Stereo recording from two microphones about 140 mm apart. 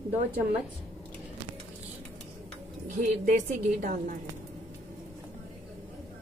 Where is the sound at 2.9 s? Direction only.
65° right (ahead or behind).